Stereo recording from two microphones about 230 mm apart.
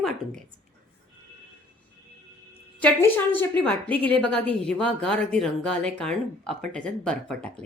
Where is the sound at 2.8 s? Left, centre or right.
Centre.